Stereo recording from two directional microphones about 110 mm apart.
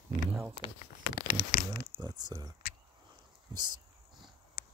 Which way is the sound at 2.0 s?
35° right (ahead or behind).